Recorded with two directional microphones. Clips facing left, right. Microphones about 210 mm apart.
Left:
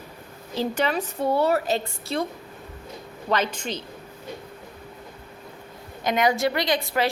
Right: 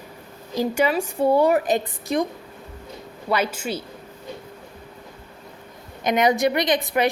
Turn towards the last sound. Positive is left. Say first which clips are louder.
# right 3 dB
turn(degrees=-20)  # may be behind; listen again after turning